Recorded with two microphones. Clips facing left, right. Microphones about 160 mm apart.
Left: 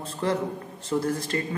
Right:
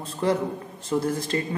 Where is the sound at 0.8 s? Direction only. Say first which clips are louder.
Right 1 dB; 20° right (ahead or behind).